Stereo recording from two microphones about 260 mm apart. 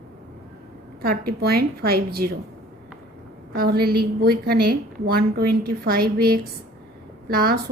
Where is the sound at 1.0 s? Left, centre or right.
Right.